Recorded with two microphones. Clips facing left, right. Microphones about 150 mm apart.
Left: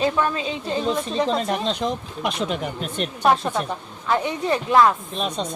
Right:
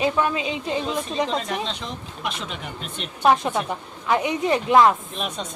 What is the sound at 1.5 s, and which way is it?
Speech, 45° left (ahead or behind).